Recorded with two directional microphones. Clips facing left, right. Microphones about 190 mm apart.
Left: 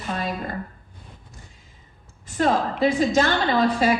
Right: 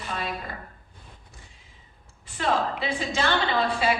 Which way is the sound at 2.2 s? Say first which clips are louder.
Left 4 dB; 45° left (ahead or behind).